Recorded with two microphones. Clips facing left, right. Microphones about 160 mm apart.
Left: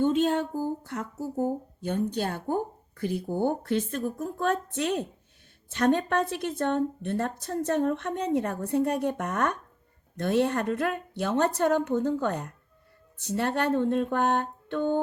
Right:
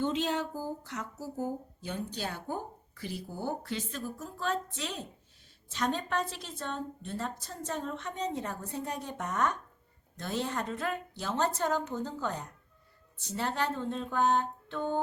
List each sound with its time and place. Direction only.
0.0 s speech: 50° left (ahead or behind)